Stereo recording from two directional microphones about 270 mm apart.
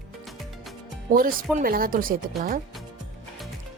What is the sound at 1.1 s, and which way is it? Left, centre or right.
Speech, right.